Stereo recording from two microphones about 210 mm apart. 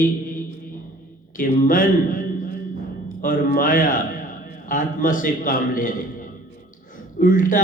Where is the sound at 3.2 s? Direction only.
40° left (ahead or behind).